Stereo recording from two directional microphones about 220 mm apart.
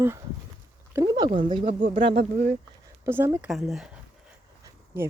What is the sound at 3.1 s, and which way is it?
Speech, 10° right (ahead or behind).